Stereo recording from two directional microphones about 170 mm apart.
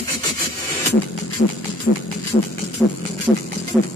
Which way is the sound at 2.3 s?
35° left (ahead or behind).